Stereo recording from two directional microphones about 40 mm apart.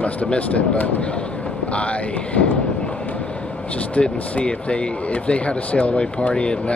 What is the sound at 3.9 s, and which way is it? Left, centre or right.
Speech, left.